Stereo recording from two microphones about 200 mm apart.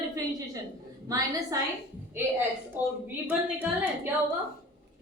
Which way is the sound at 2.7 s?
10° right (ahead or behind).